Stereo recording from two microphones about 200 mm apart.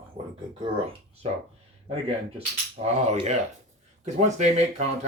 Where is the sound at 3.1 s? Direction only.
35° right (ahead or behind).